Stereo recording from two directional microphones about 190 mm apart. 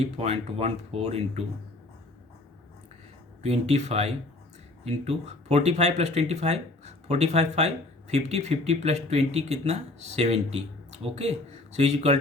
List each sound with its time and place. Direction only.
0.0 s speech: 35° right (ahead or behind)
3.4 s speech: 35° right (ahead or behind)